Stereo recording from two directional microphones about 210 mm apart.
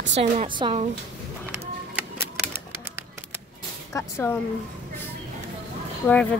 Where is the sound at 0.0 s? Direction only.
35° right (ahead or behind).